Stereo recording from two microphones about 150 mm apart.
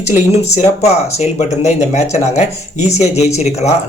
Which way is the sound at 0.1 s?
45° left (ahead or behind).